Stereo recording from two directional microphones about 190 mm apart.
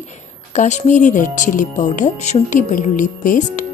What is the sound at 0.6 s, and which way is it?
Speech, 40° left (ahead or behind).